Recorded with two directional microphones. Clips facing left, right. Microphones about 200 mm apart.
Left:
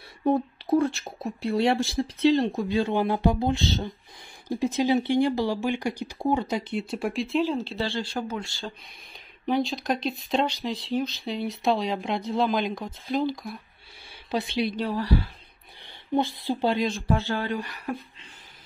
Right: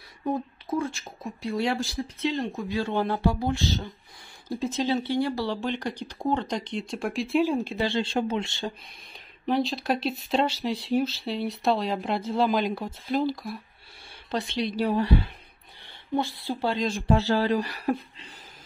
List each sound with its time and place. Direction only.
0.2 s a sound: 35° left (ahead or behind)
1.5 s speech: 25° left (ahead or behind)
2.8 s speech: 15° left (ahead or behind); by 8.7 s 20° right (ahead or behind)
9.5 s speech: centre (ahead or behind)
14.9 s a woman's voice: 25° right (ahead or behind)
16.2 s speech: 20° left (ahead or behind)
17.1 s speech: 35° right (ahead or behind)